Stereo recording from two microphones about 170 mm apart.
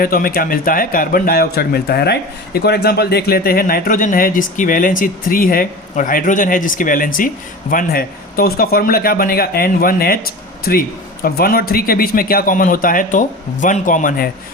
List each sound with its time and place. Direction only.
0.0 s a man's voice: 60° left (ahead or behind)